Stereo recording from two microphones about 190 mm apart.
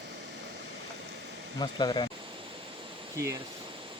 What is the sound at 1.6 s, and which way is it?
Speech, 20° left (ahead or behind).